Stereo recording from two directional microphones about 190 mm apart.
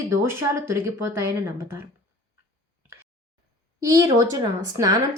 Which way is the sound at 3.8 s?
15° right (ahead or behind).